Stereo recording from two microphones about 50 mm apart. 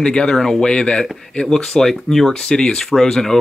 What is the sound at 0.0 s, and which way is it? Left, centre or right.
Speech, centre.